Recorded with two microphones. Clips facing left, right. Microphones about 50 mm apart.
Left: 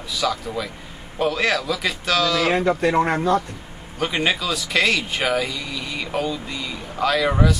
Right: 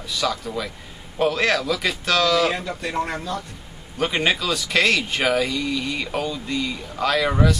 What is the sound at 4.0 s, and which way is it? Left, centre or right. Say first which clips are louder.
Speech: even; centre.